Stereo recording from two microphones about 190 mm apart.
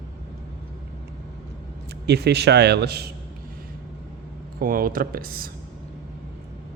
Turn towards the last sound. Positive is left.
turn(degrees=-50)  # may be behind; listen again after turning